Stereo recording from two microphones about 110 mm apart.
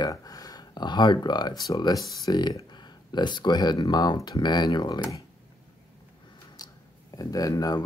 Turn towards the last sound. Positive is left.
turn(degrees=35)  # may be behind; listen again after turning